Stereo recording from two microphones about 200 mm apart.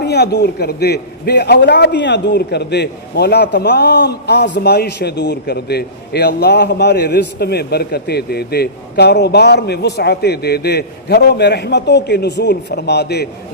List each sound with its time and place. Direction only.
0.0 s a man's voice: 55° left (ahead or behind)